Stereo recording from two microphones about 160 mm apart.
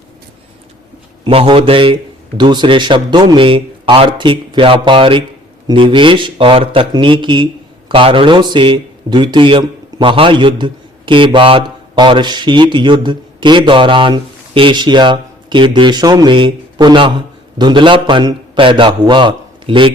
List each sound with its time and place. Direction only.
1.2 s a man's voice: 35° right (ahead or behind)